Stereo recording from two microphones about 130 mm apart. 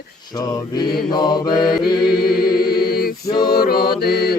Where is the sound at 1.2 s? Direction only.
35° left (ahead or behind).